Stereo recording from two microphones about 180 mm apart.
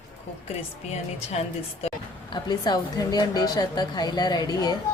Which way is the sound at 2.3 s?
25° left (ahead or behind).